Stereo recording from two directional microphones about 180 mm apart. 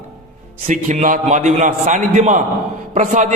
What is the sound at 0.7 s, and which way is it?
A man's voice, 45° right (ahead or behind).